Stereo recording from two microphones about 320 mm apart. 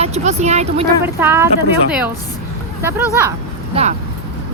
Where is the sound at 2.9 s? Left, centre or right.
Centre.